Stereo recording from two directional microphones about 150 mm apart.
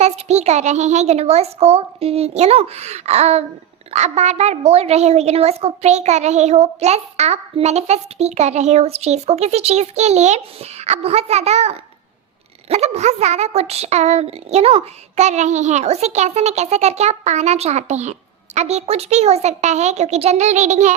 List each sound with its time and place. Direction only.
0.0 s speech: 45° right (ahead or behind)